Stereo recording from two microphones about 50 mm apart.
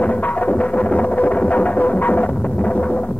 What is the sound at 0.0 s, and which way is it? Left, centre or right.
Music, left.